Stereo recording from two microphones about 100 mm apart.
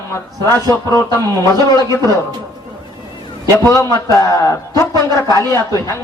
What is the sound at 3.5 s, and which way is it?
A man's voice, 30° left (ahead or behind).